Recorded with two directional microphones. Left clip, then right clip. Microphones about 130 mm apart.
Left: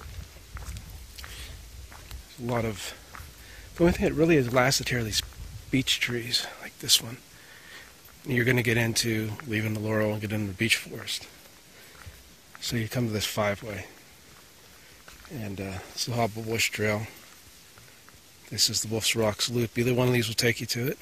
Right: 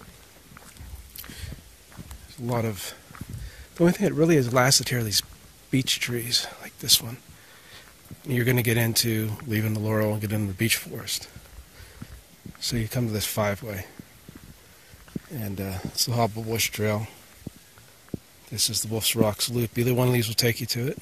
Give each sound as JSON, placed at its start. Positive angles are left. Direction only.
{"t": 2.5, "sound": "speech", "side_deg": -45}
{"t": 8.3, "sound": "speech", "side_deg": -30}
{"t": 12.5, "sound": "speech", "side_deg": -40}
{"t": 15.3, "sound": "speech", "side_deg": -45}
{"t": 18.5, "sound": "speech", "side_deg": -25}